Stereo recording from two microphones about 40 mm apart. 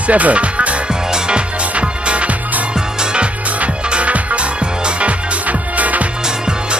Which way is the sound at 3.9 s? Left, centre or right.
Right.